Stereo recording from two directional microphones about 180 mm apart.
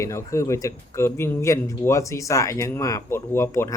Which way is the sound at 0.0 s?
15° left (ahead or behind).